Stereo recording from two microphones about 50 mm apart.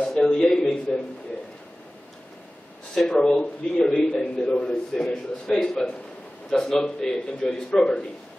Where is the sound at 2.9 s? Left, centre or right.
Centre.